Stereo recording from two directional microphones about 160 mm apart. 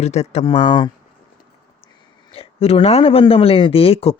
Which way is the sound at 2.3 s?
35° left (ahead or behind).